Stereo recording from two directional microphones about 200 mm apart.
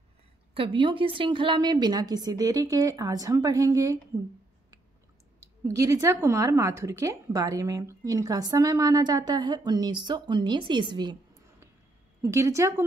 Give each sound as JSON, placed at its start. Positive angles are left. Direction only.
{"t": 0.6, "sound": "a woman's voice", "side_deg": -25}
{"t": 5.7, "sound": "a woman's voice", "side_deg": -15}